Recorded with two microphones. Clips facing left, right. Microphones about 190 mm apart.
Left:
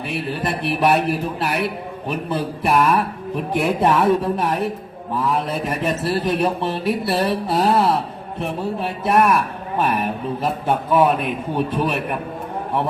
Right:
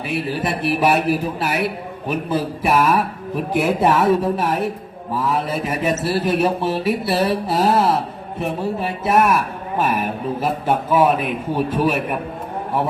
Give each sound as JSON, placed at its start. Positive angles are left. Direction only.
{"t": 0.1, "sound": "a man's voice", "side_deg": 0}